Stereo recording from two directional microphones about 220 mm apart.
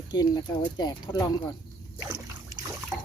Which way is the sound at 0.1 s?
20° left (ahead or behind).